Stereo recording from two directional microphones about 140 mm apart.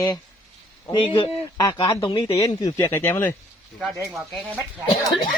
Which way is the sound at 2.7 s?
20° left (ahead or behind).